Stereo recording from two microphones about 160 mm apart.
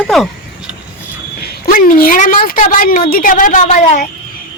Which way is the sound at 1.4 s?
60° left (ahead or behind).